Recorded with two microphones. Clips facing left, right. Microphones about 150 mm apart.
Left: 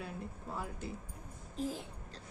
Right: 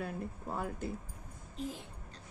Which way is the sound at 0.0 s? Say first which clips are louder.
Right 4 dB; 50° right (ahead or behind).